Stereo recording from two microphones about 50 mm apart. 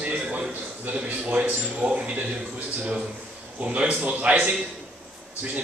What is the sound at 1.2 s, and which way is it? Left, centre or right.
Speech, right.